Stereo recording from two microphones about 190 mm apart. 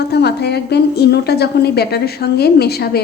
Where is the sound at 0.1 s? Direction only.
60° left (ahead or behind).